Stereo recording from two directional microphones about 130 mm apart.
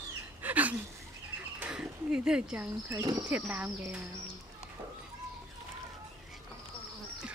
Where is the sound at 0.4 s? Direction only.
10° right (ahead or behind).